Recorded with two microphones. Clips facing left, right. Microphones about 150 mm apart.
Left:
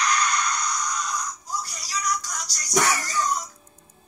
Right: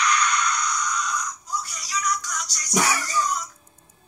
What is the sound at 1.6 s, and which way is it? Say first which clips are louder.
Music: right 2 dB; 35° left (ahead or behind).